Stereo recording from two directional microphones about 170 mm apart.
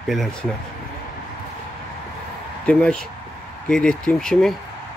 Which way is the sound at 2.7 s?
5° left (ahead or behind).